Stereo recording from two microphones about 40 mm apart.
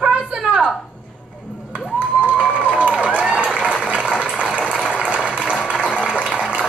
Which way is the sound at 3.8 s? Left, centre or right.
Right.